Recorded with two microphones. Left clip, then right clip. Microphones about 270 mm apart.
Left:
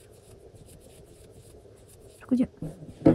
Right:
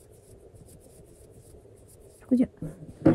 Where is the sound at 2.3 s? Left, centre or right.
Centre.